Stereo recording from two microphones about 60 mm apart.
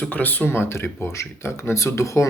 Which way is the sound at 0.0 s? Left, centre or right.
Left.